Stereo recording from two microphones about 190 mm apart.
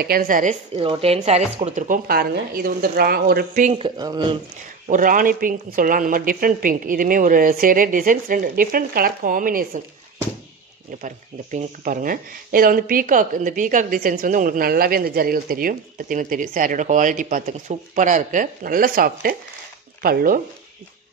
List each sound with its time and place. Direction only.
0.0 s speech: 50° right (ahead or behind)
0.8 s speech: 30° right (ahead or behind)
2.0 s speech: 55° right (ahead or behind)
3.7 s speech: 25° right (ahead or behind)
4.8 s speech: 45° right (ahead or behind)
11.0 s speech: 40° right (ahead or behind)